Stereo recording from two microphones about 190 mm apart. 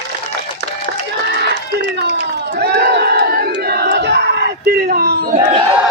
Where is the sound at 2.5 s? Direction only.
60° right (ahead or behind).